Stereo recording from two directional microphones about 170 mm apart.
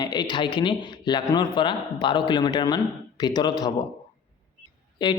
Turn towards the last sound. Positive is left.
turn(degrees=25)  # may be behind; listen again after turning